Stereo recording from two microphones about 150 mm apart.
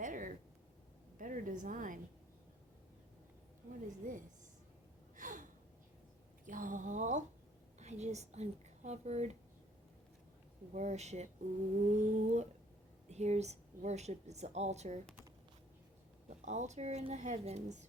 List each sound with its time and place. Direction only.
0.0 s a sound: 60° right (ahead or behind)
1.2 s a woman's voice: 60° right (ahead or behind)
3.8 s a woman's voice: 60° right (ahead or behind)
5.1 s gasp: 60° right (ahead or behind)
6.4 s speech: 60° right (ahead or behind)
10.8 s a woman's voice: 50° right (ahead or behind)
16.5 s a woman's voice: 50° right (ahead or behind)